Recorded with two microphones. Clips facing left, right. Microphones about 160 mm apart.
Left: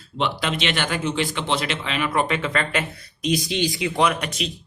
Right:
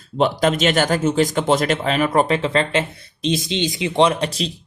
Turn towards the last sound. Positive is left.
turn(degrees=-30)  # may be behind; listen again after turning